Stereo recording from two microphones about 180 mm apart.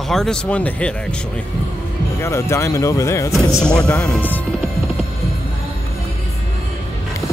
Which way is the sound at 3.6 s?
5° left (ahead or behind).